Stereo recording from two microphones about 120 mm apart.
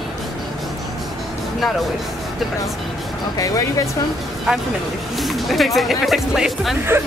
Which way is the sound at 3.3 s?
30° left (ahead or behind).